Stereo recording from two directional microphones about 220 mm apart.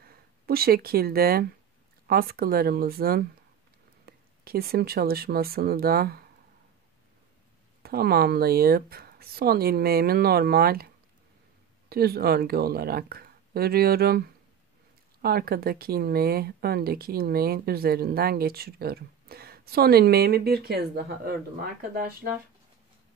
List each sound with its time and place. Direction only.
0.0 s speech: 45° right (ahead or behind)
7.8 s speech: 45° right (ahead or behind)
11.9 s speech: 45° right (ahead or behind)